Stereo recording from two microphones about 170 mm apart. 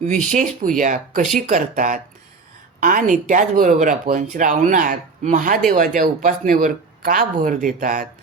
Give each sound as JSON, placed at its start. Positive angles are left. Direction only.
{"t": 0.0, "sound": "speech", "side_deg": -45}